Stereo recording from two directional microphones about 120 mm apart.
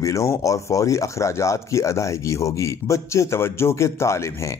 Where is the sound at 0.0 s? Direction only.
25° left (ahead or behind).